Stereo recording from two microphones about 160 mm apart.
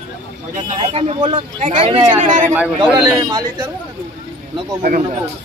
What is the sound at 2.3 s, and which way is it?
Speech, 55° right (ahead or behind).